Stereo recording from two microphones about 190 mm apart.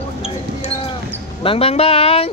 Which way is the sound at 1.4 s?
30° left (ahead or behind).